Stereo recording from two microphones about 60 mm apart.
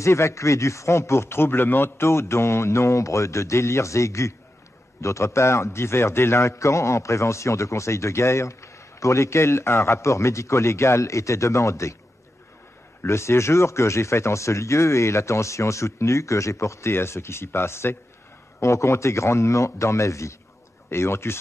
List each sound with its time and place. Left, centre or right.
0.0 s a man's voice: left
13.0 s a man's voice: left
16.9 s speech: left
18.6 s a man's voice: left
20.9 s speech: left